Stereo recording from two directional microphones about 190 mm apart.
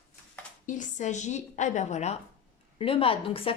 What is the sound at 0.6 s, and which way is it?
A woman's voice, 40° left (ahead or behind).